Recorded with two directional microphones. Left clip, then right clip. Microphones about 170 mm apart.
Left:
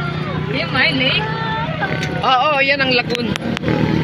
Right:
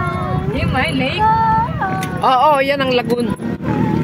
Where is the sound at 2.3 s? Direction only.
25° right (ahead or behind).